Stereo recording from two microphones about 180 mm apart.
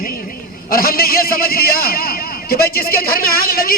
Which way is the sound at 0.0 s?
50° left (ahead or behind).